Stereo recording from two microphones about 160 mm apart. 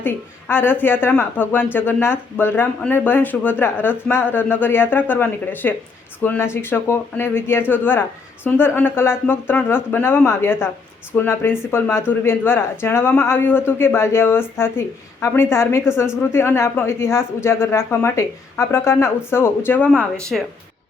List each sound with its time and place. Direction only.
0.0 s a woman's voice: 10° left (ahead or behind)
20.3 s speech: centre (ahead or behind)